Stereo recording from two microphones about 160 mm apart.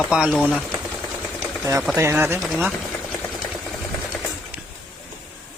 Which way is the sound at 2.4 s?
5° right (ahead or behind).